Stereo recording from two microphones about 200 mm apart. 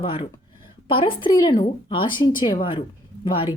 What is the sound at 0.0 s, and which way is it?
Speech, 25° left (ahead or behind).